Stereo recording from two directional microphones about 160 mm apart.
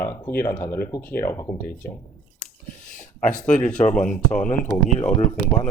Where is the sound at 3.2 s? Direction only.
50° left (ahead or behind).